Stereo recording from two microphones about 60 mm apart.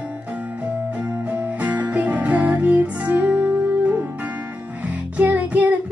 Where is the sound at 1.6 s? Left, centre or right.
Right.